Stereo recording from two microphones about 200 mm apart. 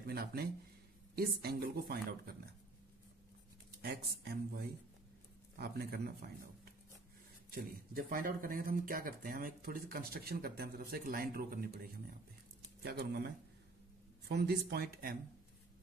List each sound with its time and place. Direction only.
0.0 s speech: 50° right (ahead or behind)
3.8 s speech: 50° right (ahead or behind)
7.5 s speech: 45° right (ahead or behind)
14.3 s speech: 50° right (ahead or behind)